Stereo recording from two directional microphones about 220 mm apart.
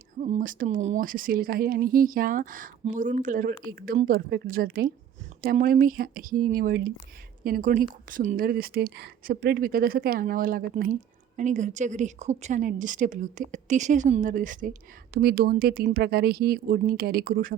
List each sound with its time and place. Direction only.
0.2 s a woman's voice: 35° right (ahead or behind)